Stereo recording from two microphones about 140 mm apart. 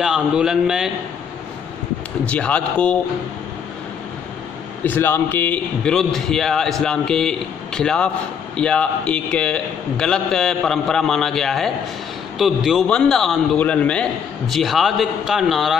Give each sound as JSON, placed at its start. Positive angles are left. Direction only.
{"t": 0.0, "sound": "a man's voice", "side_deg": -5}
{"t": 2.2, "sound": "a man's voice", "side_deg": 10}
{"t": 4.8, "sound": "a man's voice", "side_deg": 15}